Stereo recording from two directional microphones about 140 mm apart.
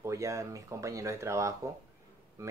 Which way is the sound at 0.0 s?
20° right (ahead or behind).